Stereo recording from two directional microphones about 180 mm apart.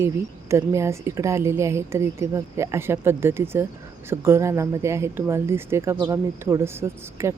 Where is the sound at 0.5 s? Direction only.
15° right (ahead or behind).